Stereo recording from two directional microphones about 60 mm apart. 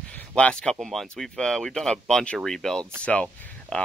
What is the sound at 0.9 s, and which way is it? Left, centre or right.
Speech, centre.